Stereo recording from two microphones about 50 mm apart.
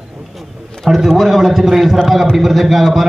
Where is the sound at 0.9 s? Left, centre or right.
Centre.